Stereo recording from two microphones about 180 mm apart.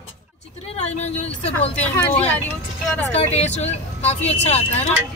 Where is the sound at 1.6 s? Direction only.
40° left (ahead or behind).